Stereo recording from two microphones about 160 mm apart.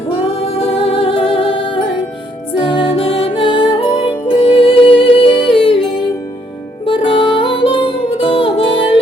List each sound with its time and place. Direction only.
0.3 s music: 35° left (ahead or behind)
6.8 s music: 35° left (ahead or behind)